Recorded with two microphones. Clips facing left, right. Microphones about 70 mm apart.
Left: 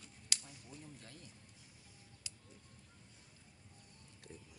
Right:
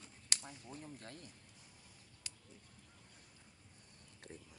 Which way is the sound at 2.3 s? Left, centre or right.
Right.